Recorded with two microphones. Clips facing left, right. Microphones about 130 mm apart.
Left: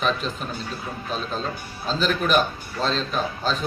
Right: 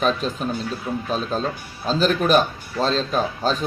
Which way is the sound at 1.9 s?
40° right (ahead or behind).